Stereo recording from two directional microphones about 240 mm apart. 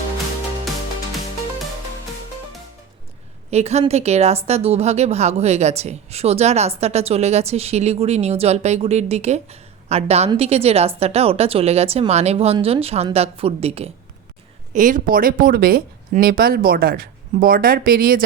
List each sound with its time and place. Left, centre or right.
3.5 s speech: right